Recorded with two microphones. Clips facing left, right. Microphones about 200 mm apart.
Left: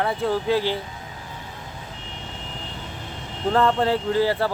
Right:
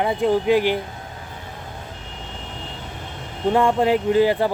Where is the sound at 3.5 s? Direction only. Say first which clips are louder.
Right 2 dB; 15° right (ahead or behind).